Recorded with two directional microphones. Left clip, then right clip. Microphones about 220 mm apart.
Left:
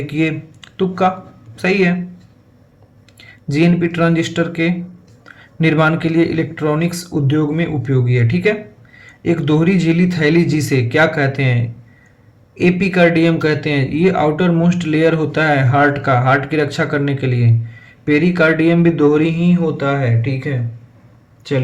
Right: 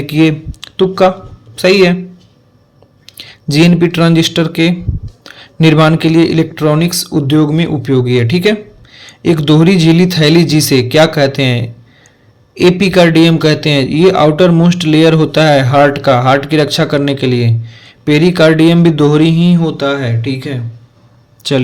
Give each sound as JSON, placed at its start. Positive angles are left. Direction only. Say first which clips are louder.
{"t": 0.0, "sound": "speech", "louder": "right 7 dB", "side_deg": -40}
{"t": 3.1, "sound": "a man's voice", "louder": "right 7 dB", "side_deg": -40}
{"t": 12.8, "sound": "a man's voice", "louder": "right 4 dB", "side_deg": -45}